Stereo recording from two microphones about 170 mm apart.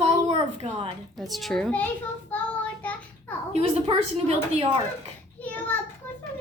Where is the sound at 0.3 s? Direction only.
35° right (ahead or behind).